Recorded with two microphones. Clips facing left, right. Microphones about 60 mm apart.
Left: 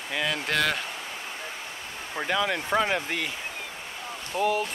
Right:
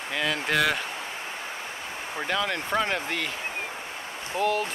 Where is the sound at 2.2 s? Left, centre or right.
Centre.